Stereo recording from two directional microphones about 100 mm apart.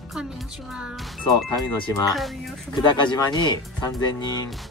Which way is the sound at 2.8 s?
45° left (ahead or behind).